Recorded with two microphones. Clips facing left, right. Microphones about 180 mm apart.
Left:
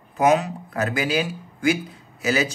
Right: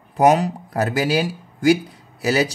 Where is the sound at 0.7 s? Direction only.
35° right (ahead or behind).